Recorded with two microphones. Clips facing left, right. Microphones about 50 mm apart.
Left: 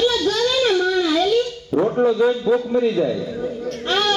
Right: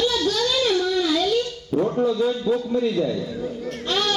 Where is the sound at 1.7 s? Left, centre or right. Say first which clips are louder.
Left 3 dB; centre.